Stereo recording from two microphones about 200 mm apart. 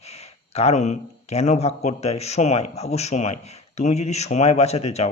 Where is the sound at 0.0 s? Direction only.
30° left (ahead or behind).